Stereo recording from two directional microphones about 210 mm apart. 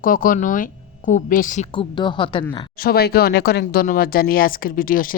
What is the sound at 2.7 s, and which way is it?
Speech, 45° left (ahead or behind).